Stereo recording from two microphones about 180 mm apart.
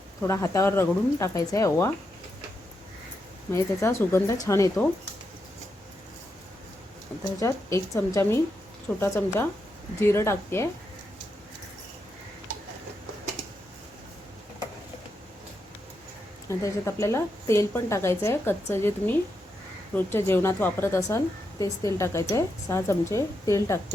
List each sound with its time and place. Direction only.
0.2 s a woman's voice: 15° left (ahead or behind)
3.5 s a woman's voice: 15° left (ahead or behind)
7.3 s a woman's voice: 15° left (ahead or behind)
16.5 s a woman's voice: 15° left (ahead or behind)